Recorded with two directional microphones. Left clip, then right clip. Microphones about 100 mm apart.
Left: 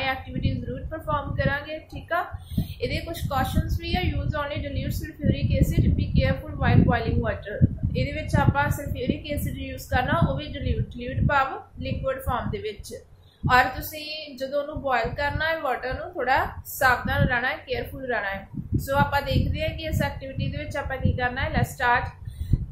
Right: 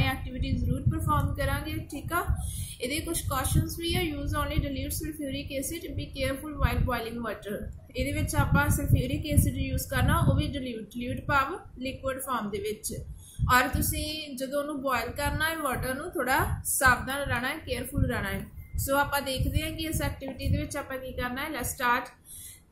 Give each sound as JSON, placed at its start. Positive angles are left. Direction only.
{"t": 0.0, "sound": "a sound", "side_deg": -45}
{"t": 1.0, "sound": "a woman's voice", "side_deg": -50}
{"t": 15.8, "sound": "a woman's voice", "side_deg": -75}
{"t": 16.9, "sound": "a woman's voice", "side_deg": -50}